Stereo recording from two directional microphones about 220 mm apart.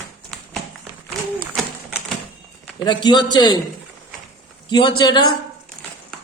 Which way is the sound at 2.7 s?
20° left (ahead or behind).